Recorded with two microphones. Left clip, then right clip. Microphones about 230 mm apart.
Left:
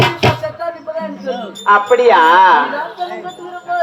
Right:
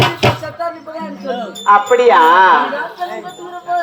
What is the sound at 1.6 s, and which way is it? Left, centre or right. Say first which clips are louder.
Speech: even; left.